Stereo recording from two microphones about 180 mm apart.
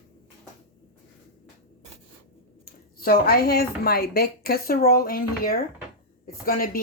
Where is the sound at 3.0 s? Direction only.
55° left (ahead or behind).